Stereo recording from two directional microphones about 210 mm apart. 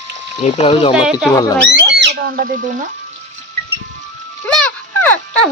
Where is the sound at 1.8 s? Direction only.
55° right (ahead or behind).